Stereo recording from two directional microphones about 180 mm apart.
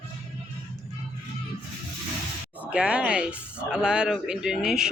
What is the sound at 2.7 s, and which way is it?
Speech, 5° right (ahead or behind).